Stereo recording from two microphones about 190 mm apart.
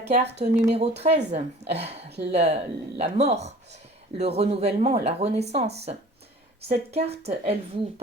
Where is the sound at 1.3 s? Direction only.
35° right (ahead or behind).